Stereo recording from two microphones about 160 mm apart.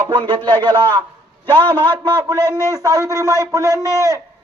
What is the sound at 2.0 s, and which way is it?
Speech, 25° right (ahead or behind).